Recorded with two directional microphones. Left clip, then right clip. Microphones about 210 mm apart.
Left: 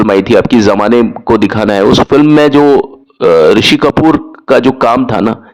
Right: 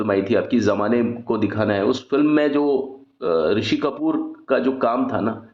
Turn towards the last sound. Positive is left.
turn(degrees=40)  # may be behind; listen again after turning